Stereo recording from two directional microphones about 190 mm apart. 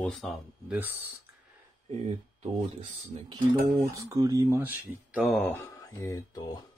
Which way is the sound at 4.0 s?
15° right (ahead or behind).